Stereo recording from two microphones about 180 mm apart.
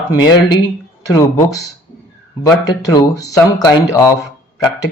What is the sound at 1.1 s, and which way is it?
Speech, 20° left (ahead or behind).